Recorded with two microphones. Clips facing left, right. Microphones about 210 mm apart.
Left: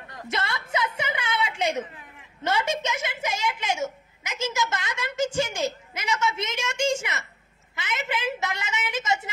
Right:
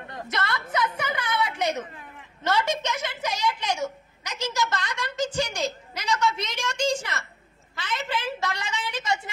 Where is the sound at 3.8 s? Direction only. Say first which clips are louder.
Even; 20° left (ahead or behind).